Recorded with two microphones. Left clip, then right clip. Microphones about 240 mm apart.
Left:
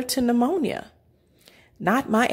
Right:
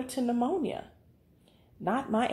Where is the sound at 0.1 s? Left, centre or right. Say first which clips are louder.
Left 8 dB; left.